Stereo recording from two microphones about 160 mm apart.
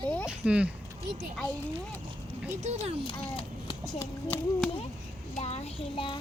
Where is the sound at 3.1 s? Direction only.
25° left (ahead or behind).